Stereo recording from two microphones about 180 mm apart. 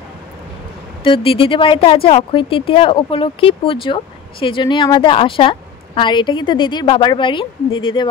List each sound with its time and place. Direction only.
1.0 s speech: 30° left (ahead or behind)